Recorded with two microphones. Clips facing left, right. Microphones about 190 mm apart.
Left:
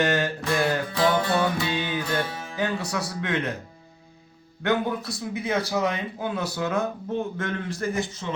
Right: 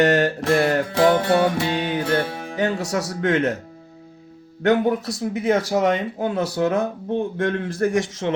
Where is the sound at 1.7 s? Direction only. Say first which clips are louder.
Right 5 dB; 70° right (ahead or behind).